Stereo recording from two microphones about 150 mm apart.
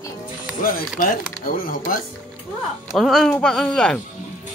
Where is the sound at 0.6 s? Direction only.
65° left (ahead or behind).